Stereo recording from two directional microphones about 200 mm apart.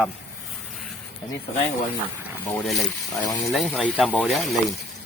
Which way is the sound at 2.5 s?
Centre (ahead or behind).